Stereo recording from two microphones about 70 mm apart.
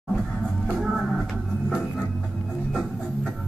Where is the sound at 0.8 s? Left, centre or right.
Centre.